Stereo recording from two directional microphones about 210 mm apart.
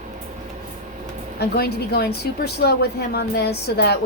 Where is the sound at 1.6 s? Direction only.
50° left (ahead or behind).